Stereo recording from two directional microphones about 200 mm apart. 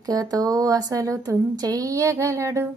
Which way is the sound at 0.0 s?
20° right (ahead or behind).